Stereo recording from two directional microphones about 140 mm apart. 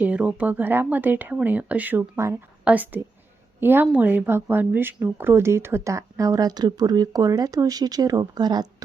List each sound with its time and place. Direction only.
0.0 s speech: 10° right (ahead or behind); by 8.6 s 30° right (ahead or behind)